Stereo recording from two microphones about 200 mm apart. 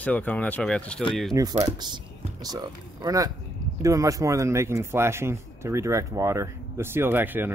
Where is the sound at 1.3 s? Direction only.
15° right (ahead or behind).